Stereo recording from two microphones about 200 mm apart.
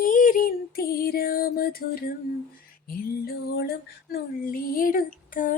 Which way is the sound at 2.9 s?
45° left (ahead or behind).